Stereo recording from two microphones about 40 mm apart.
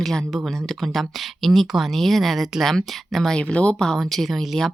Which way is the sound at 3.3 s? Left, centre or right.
Left.